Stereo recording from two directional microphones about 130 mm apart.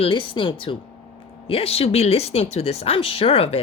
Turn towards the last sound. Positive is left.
turn(degrees=50)  # may be behind; listen again after turning